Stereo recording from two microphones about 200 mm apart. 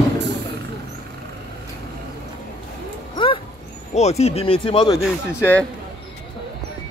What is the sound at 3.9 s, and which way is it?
Speech, 35° left (ahead or behind).